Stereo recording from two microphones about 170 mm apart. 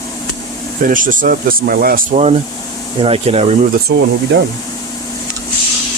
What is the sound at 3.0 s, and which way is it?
Speech, 35° right (ahead or behind).